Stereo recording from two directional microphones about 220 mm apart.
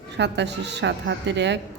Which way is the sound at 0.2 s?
50° right (ahead or behind).